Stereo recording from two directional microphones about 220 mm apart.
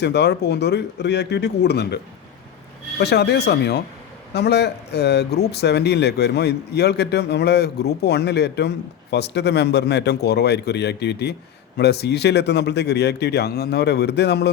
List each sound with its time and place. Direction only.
0.0 s speech: 50° left (ahead or behind)
3.0 s speech: 50° left (ahead or behind)